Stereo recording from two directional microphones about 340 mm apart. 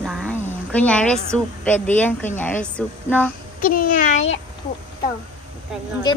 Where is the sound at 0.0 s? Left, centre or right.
Centre.